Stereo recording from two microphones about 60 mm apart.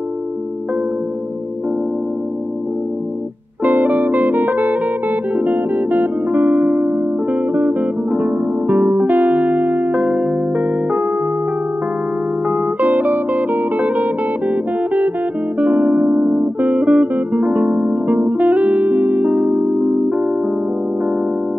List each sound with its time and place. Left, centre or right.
3.6 s music: right
12.4 s music: right